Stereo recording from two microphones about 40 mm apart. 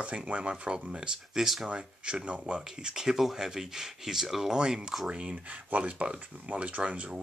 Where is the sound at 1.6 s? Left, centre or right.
Right.